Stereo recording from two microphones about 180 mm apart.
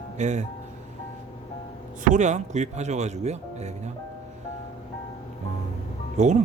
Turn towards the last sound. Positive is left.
turn(degrees=-40)  # may be behind; listen again after turning